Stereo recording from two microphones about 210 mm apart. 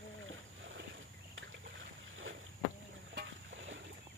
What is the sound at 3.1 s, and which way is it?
Boat, 60° right (ahead or behind).